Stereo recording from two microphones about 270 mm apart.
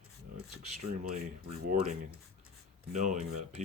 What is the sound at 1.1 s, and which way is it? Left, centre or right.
Speech, right.